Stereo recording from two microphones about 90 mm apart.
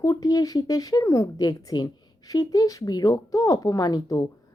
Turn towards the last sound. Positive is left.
turn(degrees=40)  # may be behind; listen again after turning